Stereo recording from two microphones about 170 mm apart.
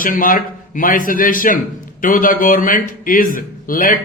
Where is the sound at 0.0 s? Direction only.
55° left (ahead or behind).